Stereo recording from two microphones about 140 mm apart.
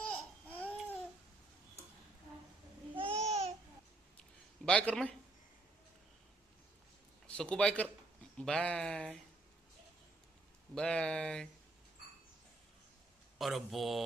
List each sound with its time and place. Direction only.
0.0 s babbling: 10° left (ahead or behind)
3.0 s babbling: 45° right (ahead or behind)
4.6 s speech: 10° left (ahead or behind)
7.3 s speech: 10° left (ahead or behind)
10.8 s speech: 5° left (ahead or behind)
13.4 s speech: centre (ahead or behind)